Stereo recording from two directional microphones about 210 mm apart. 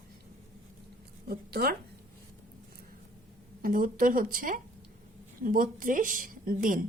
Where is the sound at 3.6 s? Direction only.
40° right (ahead or behind).